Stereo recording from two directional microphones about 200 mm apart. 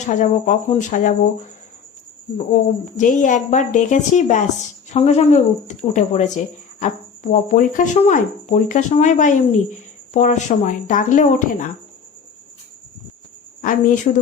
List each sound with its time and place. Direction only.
0.0 s speech: 40° left (ahead or behind)
3.0 s speech: 40° left (ahead or behind)
13.6 s speech: 45° left (ahead or behind)